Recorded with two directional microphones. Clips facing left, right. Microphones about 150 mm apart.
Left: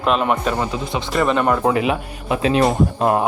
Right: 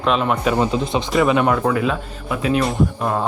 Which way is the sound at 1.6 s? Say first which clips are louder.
Left 1 dB; 20° left (ahead or behind).